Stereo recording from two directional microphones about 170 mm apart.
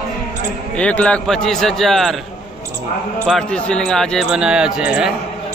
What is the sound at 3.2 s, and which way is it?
A man's voice, 5° left (ahead or behind).